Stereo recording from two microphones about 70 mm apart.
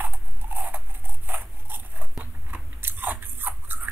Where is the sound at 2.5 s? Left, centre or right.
Right.